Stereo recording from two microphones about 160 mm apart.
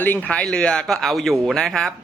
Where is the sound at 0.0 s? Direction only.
10° left (ahead or behind).